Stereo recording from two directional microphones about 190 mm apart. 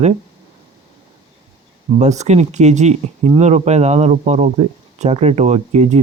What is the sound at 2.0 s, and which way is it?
Speech, 35° right (ahead or behind).